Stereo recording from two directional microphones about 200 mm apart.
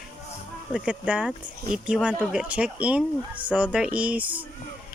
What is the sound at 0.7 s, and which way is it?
Speech, 5° right (ahead or behind).